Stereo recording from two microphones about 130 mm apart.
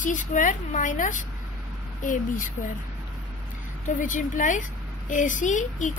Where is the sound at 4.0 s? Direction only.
90° left.